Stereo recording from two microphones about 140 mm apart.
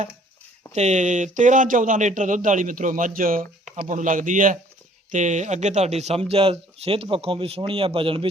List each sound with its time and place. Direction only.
0.7 s speech: 55° right (ahead or behind); by 3.4 s 90° right
3.8 s speech: 65° right (ahead or behind)
5.1 s a man's voice: 60° right (ahead or behind); by 8.3 s 40° right (ahead or behind)